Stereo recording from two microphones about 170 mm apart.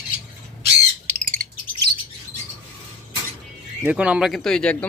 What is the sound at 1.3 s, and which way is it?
Bird, 55° right (ahead or behind).